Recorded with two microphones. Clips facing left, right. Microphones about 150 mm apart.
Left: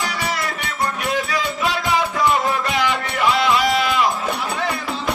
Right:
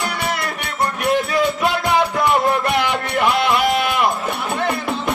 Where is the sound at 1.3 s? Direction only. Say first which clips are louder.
Right 4 dB; 55° right (ahead or behind).